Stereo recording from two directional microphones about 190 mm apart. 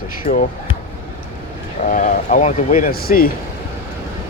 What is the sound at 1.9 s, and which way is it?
Speech, 45° left (ahead or behind).